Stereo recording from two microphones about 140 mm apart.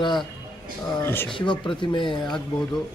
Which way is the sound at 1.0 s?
15° left (ahead or behind).